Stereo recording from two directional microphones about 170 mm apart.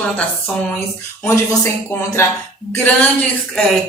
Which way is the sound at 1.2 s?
15° left (ahead or behind).